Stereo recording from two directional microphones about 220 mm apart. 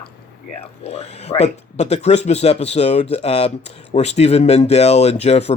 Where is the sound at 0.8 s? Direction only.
30° left (ahead or behind).